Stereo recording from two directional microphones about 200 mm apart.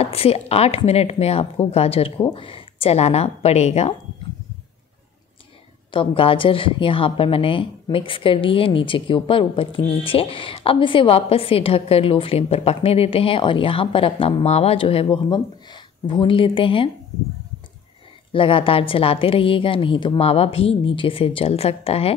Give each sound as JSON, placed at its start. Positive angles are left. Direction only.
{"t": 0.0, "sound": "speech", "side_deg": 30}
{"t": 5.9, "sound": "a woman's voice", "side_deg": 25}
{"t": 18.3, "sound": "a woman's voice", "side_deg": 25}